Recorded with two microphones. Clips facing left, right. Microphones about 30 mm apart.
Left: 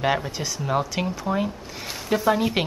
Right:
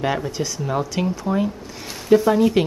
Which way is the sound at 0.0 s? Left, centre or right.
Centre.